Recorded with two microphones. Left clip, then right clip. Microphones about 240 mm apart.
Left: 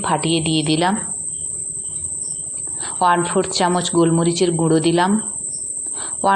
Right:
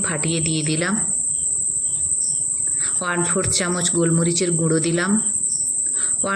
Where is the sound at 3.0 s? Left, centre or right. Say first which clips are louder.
Left 8 dB; left.